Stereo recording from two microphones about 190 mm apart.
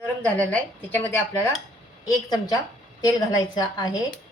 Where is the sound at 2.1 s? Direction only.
20° left (ahead or behind).